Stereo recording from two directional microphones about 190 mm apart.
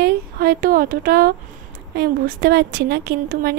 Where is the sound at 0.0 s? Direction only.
50° right (ahead or behind).